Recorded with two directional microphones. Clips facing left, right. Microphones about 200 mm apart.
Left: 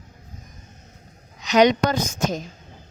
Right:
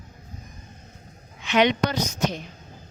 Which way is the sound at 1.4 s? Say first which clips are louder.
Left 4 dB; 40° left (ahead or behind).